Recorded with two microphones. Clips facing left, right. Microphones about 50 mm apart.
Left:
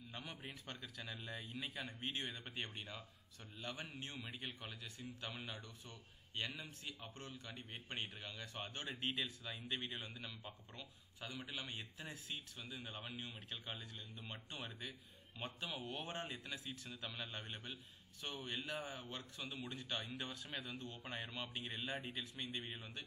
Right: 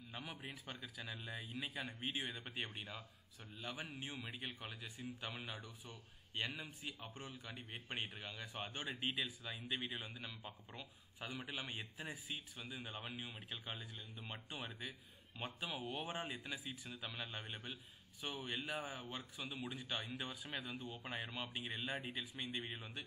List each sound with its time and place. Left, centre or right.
0.1 s speech: centre
10.8 s speech: centre